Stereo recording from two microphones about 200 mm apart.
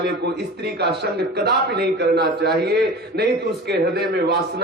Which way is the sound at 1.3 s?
55° right (ahead or behind).